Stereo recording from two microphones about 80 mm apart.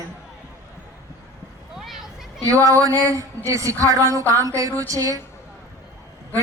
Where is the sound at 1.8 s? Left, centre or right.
Centre.